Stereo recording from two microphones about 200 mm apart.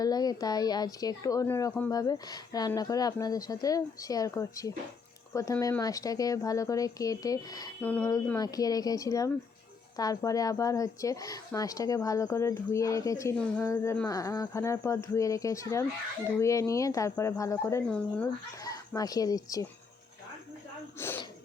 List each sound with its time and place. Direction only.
0.0 s speech: 20° left (ahead or behind)
18.6 s speech: 20° left (ahead or behind)
21.0 s a sound: 10° left (ahead or behind)